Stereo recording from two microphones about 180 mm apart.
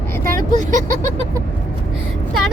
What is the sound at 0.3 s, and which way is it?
Speech, 50° right (ahead or behind).